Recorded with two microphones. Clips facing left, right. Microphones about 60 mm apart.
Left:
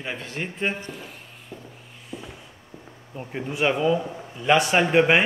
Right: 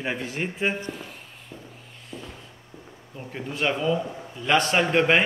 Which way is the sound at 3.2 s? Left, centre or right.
Centre.